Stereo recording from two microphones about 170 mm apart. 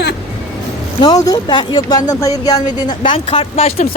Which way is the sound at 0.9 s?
20° left (ahead or behind).